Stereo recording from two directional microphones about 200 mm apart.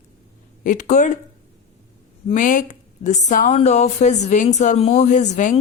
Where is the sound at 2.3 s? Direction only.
40° left (ahead or behind).